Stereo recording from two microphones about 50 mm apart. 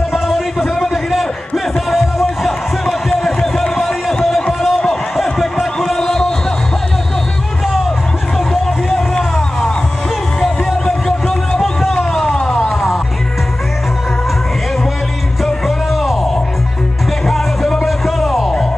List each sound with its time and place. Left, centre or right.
0.1 s a sound: centre
8.8 s hubbub: centre
10.4 s music: centre
12.1 s a sound: centre
15.4 s music: centre
17.3 s music: centre